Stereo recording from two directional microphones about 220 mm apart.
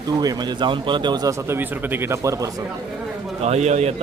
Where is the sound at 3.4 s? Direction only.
30° right (ahead or behind).